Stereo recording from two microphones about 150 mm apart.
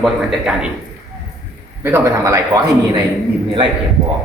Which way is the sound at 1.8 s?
15° right (ahead or behind).